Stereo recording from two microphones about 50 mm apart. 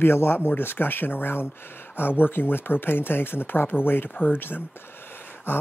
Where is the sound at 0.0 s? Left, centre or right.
Left.